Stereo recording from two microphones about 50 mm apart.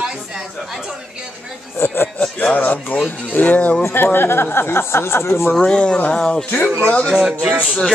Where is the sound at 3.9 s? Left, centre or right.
Left.